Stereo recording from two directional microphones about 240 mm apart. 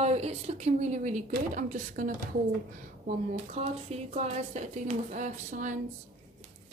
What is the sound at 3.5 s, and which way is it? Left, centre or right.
Speech, right.